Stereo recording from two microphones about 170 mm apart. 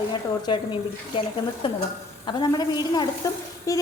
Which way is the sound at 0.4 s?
30° left (ahead or behind).